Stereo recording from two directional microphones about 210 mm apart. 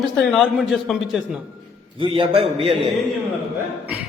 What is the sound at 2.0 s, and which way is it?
Speech, 25° right (ahead or behind).